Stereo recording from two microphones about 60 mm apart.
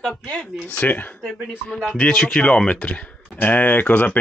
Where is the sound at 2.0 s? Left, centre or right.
Centre.